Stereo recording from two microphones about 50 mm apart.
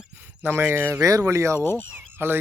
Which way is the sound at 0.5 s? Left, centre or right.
Right.